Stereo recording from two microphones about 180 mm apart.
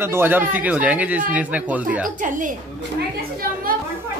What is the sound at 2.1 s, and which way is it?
Speech, 45° right (ahead or behind).